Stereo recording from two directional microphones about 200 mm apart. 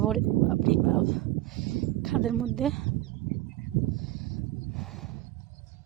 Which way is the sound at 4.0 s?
Centre (ahead or behind).